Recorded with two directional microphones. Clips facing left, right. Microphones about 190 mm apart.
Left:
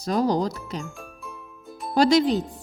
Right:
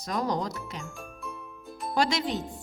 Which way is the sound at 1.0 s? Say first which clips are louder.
Even; centre (ahead or behind).